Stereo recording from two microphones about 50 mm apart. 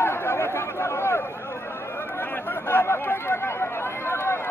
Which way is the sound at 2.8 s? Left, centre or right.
Left.